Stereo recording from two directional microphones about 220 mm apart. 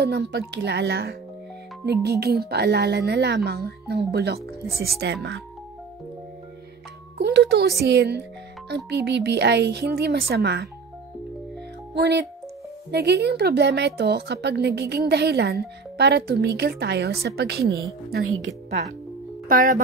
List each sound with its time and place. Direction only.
0.0 s a woman's voice: 45° right (ahead or behind)
7.2 s a woman's voice: 45° right (ahead or behind)
11.9 s a woman's voice: 50° right (ahead or behind)
19.4 s speech: 40° right (ahead or behind)